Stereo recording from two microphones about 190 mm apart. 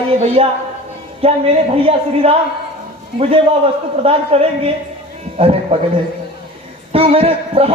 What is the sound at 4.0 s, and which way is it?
A man's voice, 30° right (ahead or behind).